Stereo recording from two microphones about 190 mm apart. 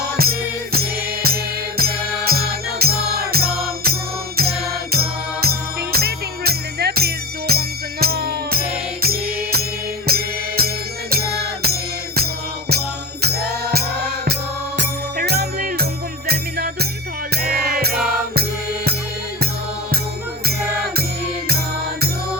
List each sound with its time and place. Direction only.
0.0 s music: 55° right (ahead or behind)